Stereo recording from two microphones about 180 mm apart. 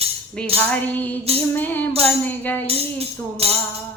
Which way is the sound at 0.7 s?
10° left (ahead or behind).